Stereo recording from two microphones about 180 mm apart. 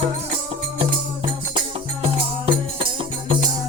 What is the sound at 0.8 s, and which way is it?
Music, 30° right (ahead or behind).